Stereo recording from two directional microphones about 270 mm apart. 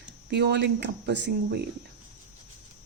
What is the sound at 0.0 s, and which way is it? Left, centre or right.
Speech, right.